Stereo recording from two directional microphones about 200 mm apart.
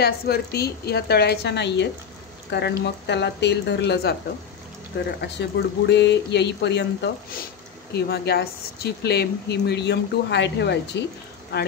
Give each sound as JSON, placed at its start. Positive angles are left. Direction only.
{"t": 0.0, "sound": "speech", "side_deg": 55}